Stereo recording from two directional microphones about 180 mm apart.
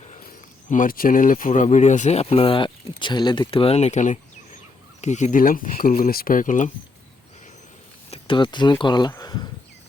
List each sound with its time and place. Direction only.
0.1 s speech: 50° left (ahead or behind)
8.1 s speech: 25° left (ahead or behind)